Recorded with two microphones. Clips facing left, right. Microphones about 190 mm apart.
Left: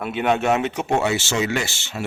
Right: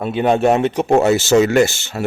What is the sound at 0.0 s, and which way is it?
Speech, 35° right (ahead or behind).